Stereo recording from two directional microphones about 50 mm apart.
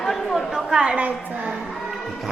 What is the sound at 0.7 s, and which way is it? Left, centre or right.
Speech, centre.